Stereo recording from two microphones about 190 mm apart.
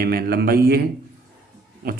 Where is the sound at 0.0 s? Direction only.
50° right (ahead or behind).